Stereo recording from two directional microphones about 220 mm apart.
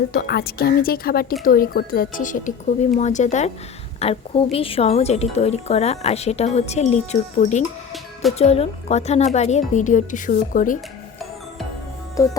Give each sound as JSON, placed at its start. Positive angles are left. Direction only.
{"t": 0.1, "sound": "a woman's voice", "side_deg": 45}
{"t": 12.1, "sound": "music", "side_deg": 15}